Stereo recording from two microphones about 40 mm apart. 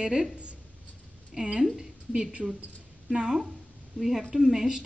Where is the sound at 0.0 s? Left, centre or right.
Right.